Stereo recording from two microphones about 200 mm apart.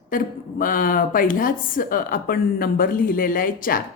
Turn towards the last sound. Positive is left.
turn(degrees=45)  # may be behind; listen again after turning